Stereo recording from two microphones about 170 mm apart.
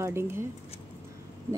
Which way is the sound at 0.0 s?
15° right (ahead or behind).